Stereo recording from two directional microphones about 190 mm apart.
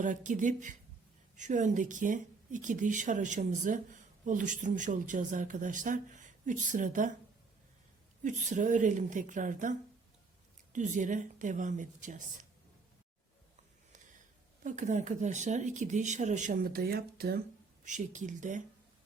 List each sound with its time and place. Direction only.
0.0 s a man's voice: 40° right (ahead or behind)
8.2 s speech: 40° right (ahead or behind)
14.6 s speech: 40° right (ahead or behind)
17.8 s speech: 40° right (ahead or behind)